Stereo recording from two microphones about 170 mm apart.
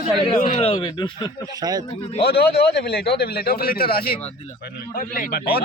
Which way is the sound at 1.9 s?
35° left (ahead or behind).